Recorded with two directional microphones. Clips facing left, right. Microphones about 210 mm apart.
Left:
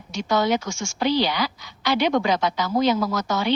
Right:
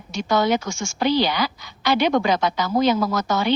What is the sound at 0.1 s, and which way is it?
A woman's voice, 55° right (ahead or behind).